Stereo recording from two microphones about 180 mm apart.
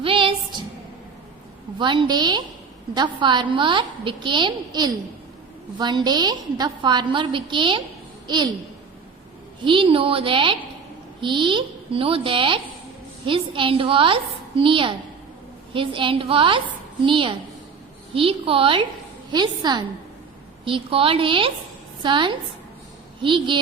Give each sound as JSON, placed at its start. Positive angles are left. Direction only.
{"t": 0.0, "sound": "a sound", "side_deg": -30}
{"t": 1.8, "sound": "a woman's voice", "side_deg": -25}
{"t": 9.6, "sound": "a woman's voice", "side_deg": -30}